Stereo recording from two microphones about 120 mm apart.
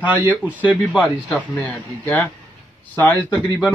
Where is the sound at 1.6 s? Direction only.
15° left (ahead or behind).